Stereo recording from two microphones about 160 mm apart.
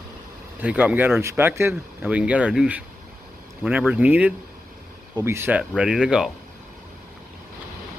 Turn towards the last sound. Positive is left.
turn(degrees=-5)  # may be behind; listen again after turning